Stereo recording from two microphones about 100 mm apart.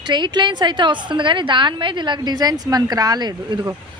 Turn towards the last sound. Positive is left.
turn(degrees=-45)  # may be behind; listen again after turning